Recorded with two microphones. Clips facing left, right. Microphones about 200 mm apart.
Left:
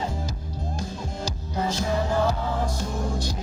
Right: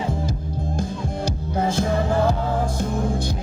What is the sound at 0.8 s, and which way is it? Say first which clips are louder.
Music: right 6 dB; 55° right (ahead or behind).